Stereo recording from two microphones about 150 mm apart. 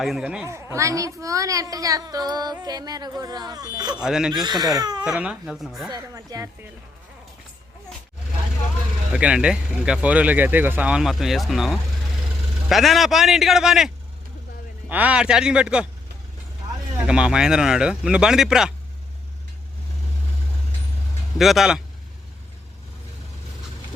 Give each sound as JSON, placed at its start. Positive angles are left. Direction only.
{"t": 0.0, "sound": "speech", "side_deg": -5}
{"t": 0.4, "sound": "a woman's voice", "side_deg": -20}
{"t": 4.0, "sound": "speech", "side_deg": -5}
{"t": 4.4, "sound": "a woman's voice", "side_deg": -25}
{"t": 5.0, "sound": "speech", "side_deg": -5}
{"t": 5.9, "sound": "a woman's voice", "side_deg": -25}
{"t": 9.1, "sound": "speech", "side_deg": -5}
{"t": 17.0, "sound": "speech", "side_deg": -5}
{"t": 21.3, "sound": "speech", "side_deg": 0}